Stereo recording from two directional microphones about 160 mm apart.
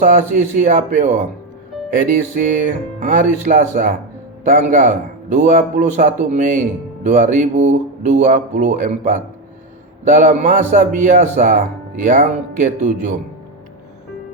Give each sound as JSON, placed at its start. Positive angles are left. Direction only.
{"t": 0.0, "sound": "a man's voice", "side_deg": -55}